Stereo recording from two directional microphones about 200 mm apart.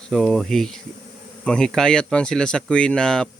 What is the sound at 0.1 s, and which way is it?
Speech, centre (ahead or behind).